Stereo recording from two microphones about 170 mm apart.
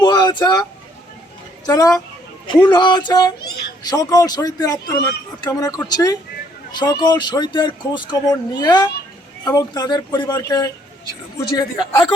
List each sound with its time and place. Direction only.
0.0 s vehicle: 25° left (ahead or behind)
1.6 s a man's voice: 20° left (ahead or behind)